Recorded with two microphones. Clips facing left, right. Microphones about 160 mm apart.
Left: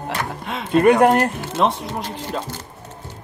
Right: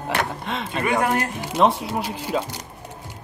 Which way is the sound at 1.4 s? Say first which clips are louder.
Right 1 dB; 15° right (ahead or behind).